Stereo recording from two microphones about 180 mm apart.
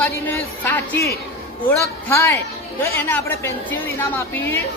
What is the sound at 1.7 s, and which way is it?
A woman's voice, 15° left (ahead or behind).